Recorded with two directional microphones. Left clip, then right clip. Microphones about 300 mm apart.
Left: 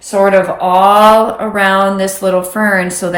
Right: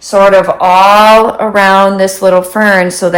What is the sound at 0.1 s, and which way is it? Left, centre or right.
Speech, right.